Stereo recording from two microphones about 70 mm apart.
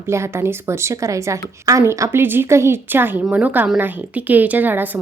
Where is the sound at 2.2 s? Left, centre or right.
Right.